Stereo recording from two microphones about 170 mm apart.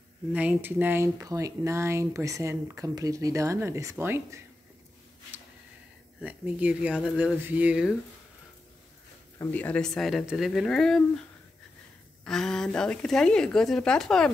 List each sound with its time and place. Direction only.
0.3 s speech: 10° right (ahead or behind)
6.2 s speech: 10° right (ahead or behind)
9.4 s speech: 10° left (ahead or behind)
12.3 s speech: 5° left (ahead or behind)